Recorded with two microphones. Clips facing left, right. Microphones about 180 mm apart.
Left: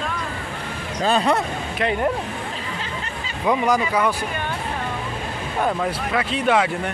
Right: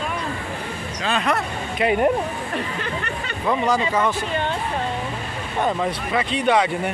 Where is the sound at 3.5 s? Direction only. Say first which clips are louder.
Left 1 dB; 15° left (ahead or behind).